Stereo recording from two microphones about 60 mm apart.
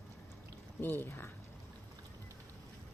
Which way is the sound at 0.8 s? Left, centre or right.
Left.